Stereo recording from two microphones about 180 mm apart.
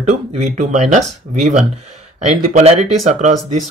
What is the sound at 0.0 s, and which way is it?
Speech, 40° right (ahead or behind).